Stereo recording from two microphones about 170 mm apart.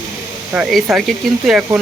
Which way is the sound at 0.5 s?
5° right (ahead or behind).